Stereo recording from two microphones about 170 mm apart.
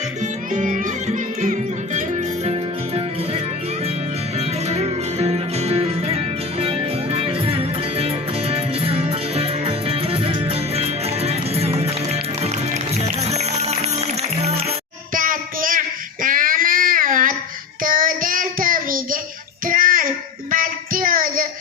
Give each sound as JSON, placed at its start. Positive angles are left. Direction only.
{"t": 0.2, "sound": "music", "side_deg": -50}
{"t": 4.4, "sound": "music", "side_deg": -40}
{"t": 15.1, "sound": "child singing", "side_deg": -55}
{"t": 16.2, "sound": "a sound", "side_deg": -55}
{"t": 17.8, "sound": "child singing", "side_deg": -55}